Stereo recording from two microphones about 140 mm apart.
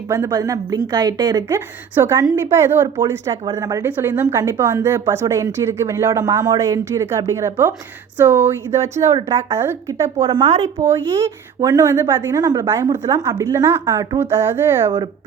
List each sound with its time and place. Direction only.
0.1 s a woman's voice: 25° right (ahead or behind)
3.8 s a woman's voice: 15° right (ahead or behind)